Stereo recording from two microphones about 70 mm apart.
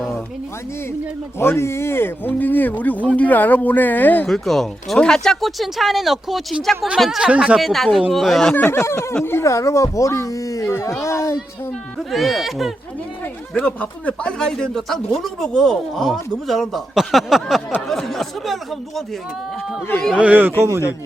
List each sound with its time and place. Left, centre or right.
1.4 s speech: left
4.3 s speech: centre
7.2 s speech: centre
7.6 s speech: centre
8.5 s speech: left
11.0 s a sound: left
11.9 s speech: centre
13.5 s speech: centre
20.1 s speech: right